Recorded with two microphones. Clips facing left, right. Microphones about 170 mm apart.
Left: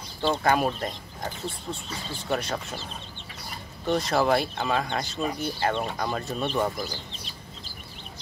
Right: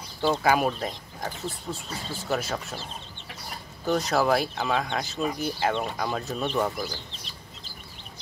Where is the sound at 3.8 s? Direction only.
Centre (ahead or behind).